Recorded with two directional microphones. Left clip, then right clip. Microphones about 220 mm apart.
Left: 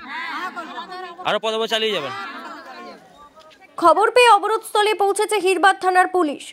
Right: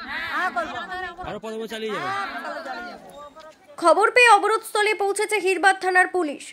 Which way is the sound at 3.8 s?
10° left (ahead or behind).